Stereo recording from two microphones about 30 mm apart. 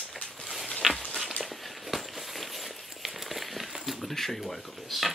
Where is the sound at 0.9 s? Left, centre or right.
Centre.